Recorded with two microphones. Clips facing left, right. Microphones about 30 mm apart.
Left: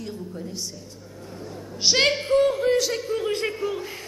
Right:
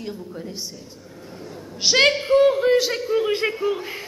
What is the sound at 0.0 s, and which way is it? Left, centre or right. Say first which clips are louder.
Speech: right 2 dB; centre.